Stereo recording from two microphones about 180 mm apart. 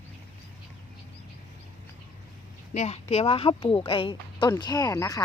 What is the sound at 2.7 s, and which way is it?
A woman's voice, 35° left (ahead or behind).